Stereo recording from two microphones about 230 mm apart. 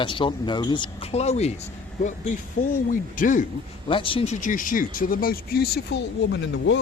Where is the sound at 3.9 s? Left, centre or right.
Left.